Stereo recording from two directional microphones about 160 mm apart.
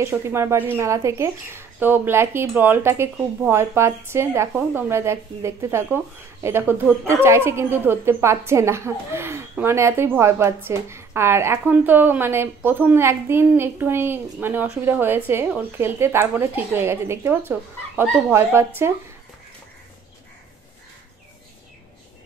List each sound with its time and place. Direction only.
0.0 s a woman's voice: 15° right (ahead or behind)
7.2 s a woman's voice: 15° right (ahead or behind)